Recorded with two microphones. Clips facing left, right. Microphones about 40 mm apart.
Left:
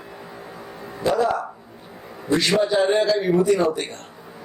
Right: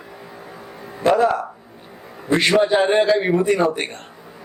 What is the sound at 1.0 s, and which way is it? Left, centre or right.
A man's voice, right.